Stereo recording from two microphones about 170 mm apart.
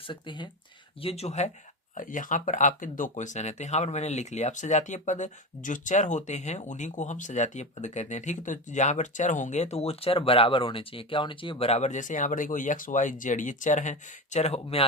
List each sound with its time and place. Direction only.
0.1 s speech: 25° left (ahead or behind)
1.0 s speech: 40° left (ahead or behind)
2.0 s speech: 50° left (ahead or behind)